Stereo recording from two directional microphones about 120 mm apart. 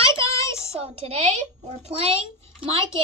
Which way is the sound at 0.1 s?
25° left (ahead or behind).